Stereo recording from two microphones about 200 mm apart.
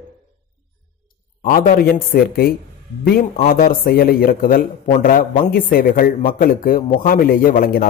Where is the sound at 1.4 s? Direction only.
45° left (ahead or behind).